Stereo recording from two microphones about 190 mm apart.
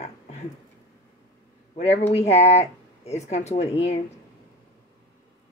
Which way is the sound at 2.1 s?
35° left (ahead or behind).